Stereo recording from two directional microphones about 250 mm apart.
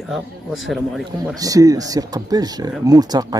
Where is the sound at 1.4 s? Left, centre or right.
Centre.